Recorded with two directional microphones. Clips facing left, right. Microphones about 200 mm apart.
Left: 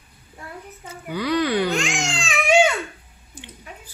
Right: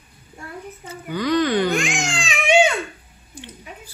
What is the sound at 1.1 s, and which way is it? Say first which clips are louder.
Speech: right 2 dB; 10° left (ahead or behind).